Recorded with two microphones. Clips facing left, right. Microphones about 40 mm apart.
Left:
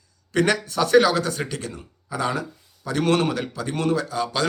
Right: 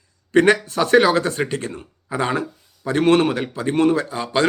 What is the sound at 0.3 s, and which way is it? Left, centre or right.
Speech, right.